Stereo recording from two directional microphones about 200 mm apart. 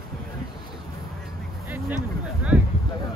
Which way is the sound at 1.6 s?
10° right (ahead or behind).